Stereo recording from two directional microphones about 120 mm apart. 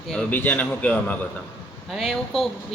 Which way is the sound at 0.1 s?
5° left (ahead or behind).